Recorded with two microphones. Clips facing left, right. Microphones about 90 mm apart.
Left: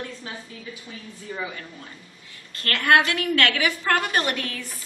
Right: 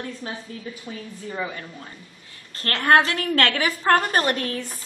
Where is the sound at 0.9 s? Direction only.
40° right (ahead or behind).